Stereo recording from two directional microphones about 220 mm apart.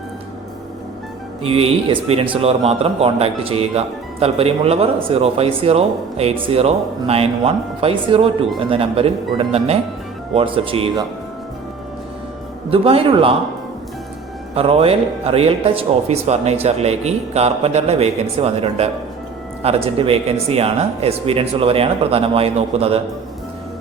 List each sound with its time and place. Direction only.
1.4 s speech: 25° right (ahead or behind)
12.7 s speech: 25° right (ahead or behind)
14.5 s speech: 25° right (ahead or behind)